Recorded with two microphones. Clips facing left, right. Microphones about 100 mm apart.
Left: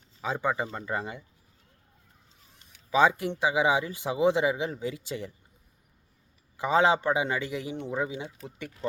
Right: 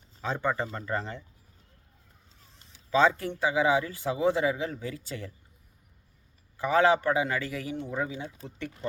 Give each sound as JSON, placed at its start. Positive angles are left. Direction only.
{"t": 0.2, "sound": "speech", "side_deg": 10}
{"t": 2.9, "sound": "speech", "side_deg": 15}
{"t": 6.6, "sound": "a man's voice", "side_deg": 20}